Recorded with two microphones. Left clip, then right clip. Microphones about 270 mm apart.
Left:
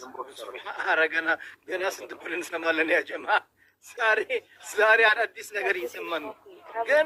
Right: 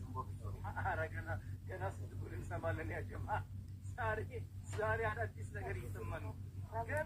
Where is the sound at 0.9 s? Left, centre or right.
Left.